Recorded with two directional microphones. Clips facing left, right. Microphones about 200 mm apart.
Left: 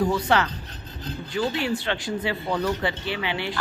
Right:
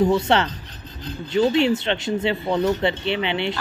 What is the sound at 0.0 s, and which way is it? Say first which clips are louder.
A woman's voice: right 4 dB; 25° right (ahead or behind).